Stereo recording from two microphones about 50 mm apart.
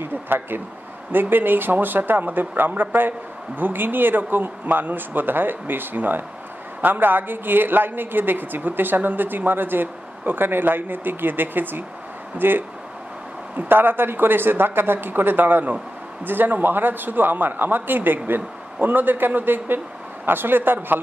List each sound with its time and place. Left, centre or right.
0.0 s a woman's voice: right